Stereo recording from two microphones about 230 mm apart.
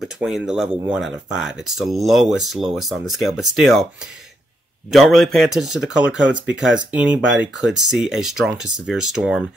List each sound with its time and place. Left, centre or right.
0.0 s speech: centre
4.9 s speech: centre
7.2 s speech: right
7.9 s speech: centre